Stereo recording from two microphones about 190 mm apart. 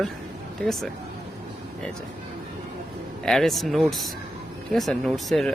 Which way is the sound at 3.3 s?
Centre (ahead or behind).